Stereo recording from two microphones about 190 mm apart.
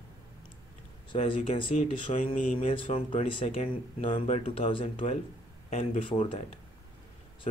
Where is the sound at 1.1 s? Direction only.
25° left (ahead or behind).